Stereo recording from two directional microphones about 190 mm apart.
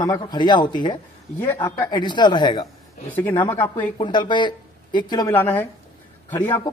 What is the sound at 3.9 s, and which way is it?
A man's voice, 25° left (ahead or behind).